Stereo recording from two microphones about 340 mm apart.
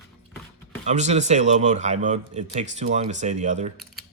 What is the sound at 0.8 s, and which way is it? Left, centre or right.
Speech, right.